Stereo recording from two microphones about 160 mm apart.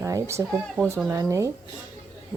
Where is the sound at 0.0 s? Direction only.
20° right (ahead or behind).